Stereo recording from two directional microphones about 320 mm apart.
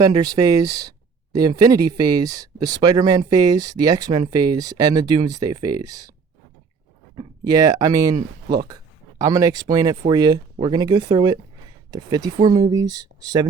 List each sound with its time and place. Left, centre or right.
0.0 s speech: centre
7.2 s speech: centre
8.1 s speech: right
8.6 s speech: centre